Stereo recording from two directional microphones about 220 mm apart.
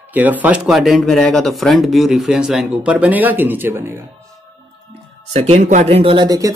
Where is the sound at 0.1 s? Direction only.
5° right (ahead or behind).